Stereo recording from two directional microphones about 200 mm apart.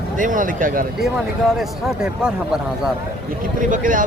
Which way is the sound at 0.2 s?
40° right (ahead or behind).